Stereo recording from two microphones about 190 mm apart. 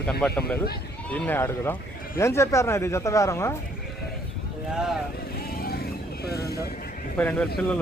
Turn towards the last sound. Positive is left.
turn(degrees=10)  # may be behind; listen again after turning